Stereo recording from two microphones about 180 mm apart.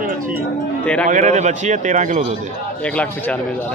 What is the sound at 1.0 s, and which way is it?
A man's voice, 45° right (ahead or behind).